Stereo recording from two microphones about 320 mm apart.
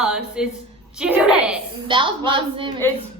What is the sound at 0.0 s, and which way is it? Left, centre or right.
A woman's voice, centre.